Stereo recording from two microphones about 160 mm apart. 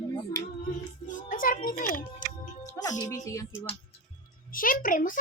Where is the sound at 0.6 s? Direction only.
55° left (ahead or behind).